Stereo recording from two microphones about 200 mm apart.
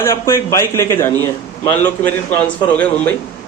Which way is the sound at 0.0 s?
15° left (ahead or behind).